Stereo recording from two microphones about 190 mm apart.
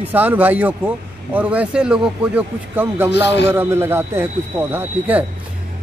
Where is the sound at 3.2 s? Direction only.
65° left (ahead or behind).